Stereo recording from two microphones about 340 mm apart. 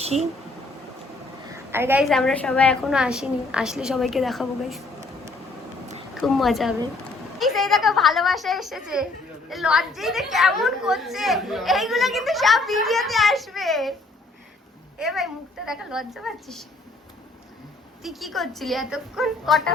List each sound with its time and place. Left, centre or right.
0.0 s speech: centre
1.7 s a woman's voice: centre
6.1 s a woman's voice: centre
14.9 s a woman's voice: centre
18.0 s a woman's voice: centre